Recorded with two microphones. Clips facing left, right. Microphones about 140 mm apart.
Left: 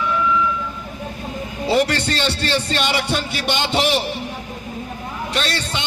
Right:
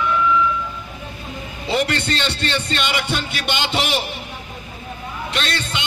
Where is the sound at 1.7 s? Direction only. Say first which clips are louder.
Left 2 dB; 35° left (ahead or behind).